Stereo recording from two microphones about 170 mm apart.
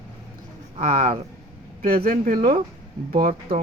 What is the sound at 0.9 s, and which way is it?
Speech, 40° right (ahead or behind).